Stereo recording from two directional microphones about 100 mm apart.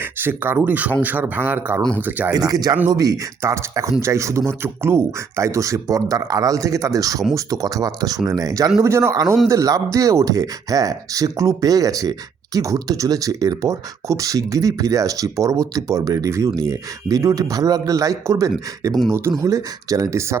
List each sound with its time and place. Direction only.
0.0 s speech: 20° right (ahead or behind)
2.3 s speech: 40° right (ahead or behind)
8.8 s speech: 25° right (ahead or behind)